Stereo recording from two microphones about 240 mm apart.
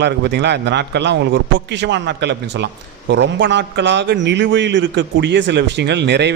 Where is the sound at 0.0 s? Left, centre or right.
Right.